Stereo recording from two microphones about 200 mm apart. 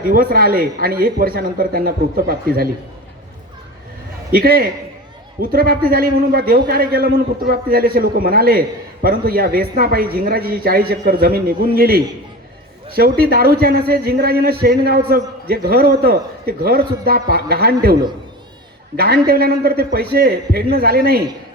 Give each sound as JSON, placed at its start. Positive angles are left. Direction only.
{"t": 0.1, "sound": "a man's voice", "side_deg": -45}
{"t": 4.3, "sound": "a man's voice", "side_deg": -50}
{"t": 18.9, "sound": "a man's voice", "side_deg": -50}